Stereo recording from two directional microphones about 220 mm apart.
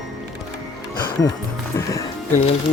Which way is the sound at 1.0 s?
20° left (ahead or behind).